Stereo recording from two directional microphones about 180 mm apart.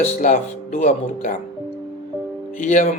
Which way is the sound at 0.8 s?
40° left (ahead or behind).